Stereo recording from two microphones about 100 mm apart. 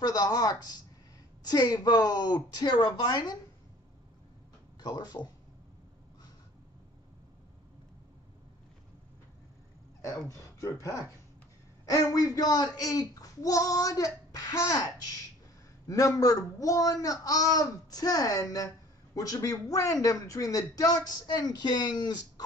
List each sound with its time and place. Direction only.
0.0 s speech: 40° left (ahead or behind)
4.7 s speech: 40° left (ahead or behind)
10.0 s speech: 30° left (ahead or behind)
15.9 s speech: 35° left (ahead or behind)